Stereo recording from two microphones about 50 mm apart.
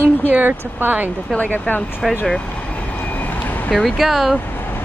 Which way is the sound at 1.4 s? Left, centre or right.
Left.